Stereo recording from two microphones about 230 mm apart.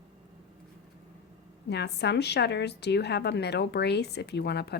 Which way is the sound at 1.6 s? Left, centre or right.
Left.